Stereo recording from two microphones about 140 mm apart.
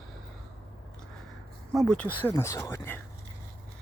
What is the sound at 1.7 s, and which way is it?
Speech, 5° left (ahead or behind).